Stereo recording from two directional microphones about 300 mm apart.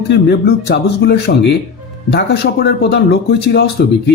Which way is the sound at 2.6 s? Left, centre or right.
Left.